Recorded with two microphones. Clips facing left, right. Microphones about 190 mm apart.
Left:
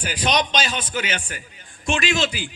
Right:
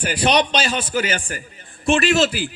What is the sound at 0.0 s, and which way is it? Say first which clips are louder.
A man's voice: right 4 dB; 10° right (ahead or behind).